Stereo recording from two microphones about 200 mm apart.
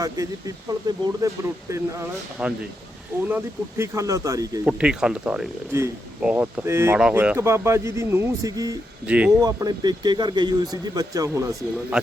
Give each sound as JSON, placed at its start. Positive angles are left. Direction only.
{"t": 0.0, "sound": "speech", "side_deg": -15}
{"t": 4.8, "sound": "speech", "side_deg": -5}
{"t": 9.0, "sound": "speech", "side_deg": -5}
{"t": 9.4, "sound": "speech", "side_deg": -20}